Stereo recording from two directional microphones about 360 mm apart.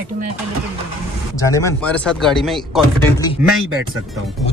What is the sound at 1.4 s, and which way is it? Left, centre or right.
Speech, centre.